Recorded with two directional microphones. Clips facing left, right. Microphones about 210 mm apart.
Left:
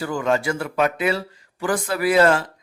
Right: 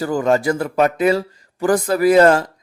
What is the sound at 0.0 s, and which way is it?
A man's voice, 40° right (ahead or behind).